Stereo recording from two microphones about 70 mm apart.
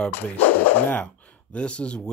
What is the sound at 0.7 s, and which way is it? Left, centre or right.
Speech, left.